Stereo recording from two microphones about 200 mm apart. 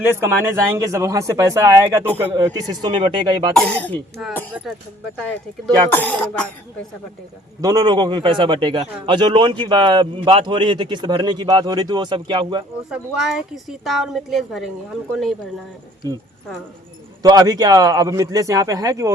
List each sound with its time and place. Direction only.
0.3 s speech: 10° right (ahead or behind)
3.5 s a woman's voice: 5° left (ahead or behind)
5.6 s speech: 10° left (ahead or behind)
7.6 s speech: 20° right (ahead or behind)
12.9 s a woman's voice: 5° right (ahead or behind)
16.0 s speech: 15° right (ahead or behind)
17.2 s speech: 20° right (ahead or behind)